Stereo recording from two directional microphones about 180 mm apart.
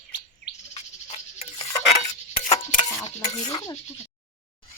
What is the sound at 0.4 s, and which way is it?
Bird, 65° left (ahead or behind).